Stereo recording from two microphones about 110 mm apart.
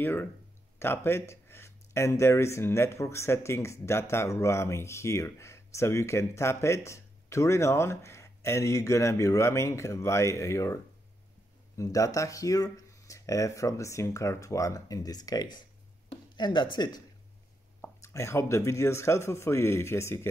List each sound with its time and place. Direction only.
0.0 s speech: 20° left (ahead or behind); by 17.0 s 40° left (ahead or behind)
17.8 s speech: 25° left (ahead or behind)